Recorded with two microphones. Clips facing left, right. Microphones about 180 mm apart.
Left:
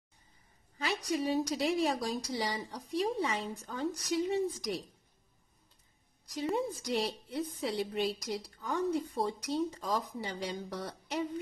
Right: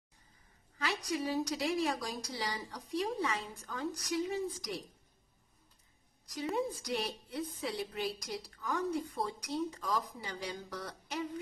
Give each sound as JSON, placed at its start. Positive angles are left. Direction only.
{"t": 0.7, "sound": "a sound", "side_deg": 25}
{"t": 1.5, "sound": "speech", "side_deg": 25}
{"t": 6.5, "sound": "speech", "side_deg": 30}